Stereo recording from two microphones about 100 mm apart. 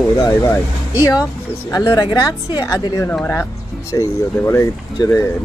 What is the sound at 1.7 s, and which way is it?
Speech, 35° left (ahead or behind).